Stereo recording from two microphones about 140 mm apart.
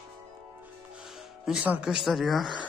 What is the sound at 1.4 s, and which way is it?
Speech, 10° right (ahead or behind).